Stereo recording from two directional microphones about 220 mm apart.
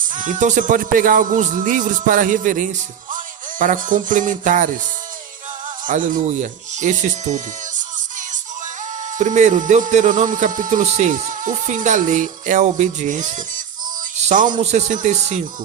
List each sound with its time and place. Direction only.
0.1 s speech: 35° right (ahead or behind)
5.8 s music: 35° right (ahead or behind)
9.1 s speech: 35° right (ahead or behind)
14.2 s music: 35° right (ahead or behind)
14.5 s speech: 30° right (ahead or behind)